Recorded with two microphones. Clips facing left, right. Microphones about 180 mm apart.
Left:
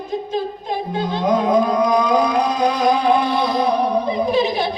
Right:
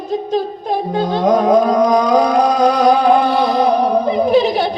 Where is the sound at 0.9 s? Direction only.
35° right (ahead or behind).